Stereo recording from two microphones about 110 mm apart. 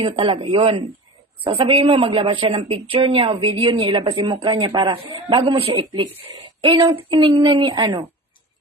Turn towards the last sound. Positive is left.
turn(degrees=-45)  # may be behind; listen again after turning